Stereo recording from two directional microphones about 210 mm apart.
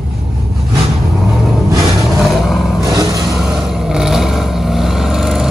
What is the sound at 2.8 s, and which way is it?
Vehicle, 15° right (ahead or behind).